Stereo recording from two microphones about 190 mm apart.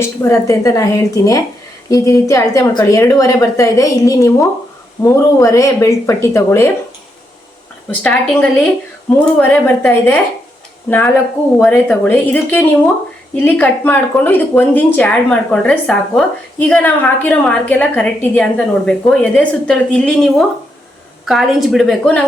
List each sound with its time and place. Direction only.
0.0 s speech: 15° left (ahead or behind)
7.9 s a woman's voice: 10° left (ahead or behind)